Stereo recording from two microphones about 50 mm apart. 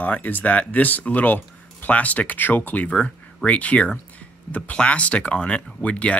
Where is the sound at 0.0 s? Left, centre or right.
Left.